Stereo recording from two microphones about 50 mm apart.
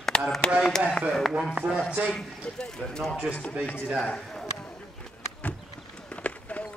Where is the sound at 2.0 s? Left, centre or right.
Centre.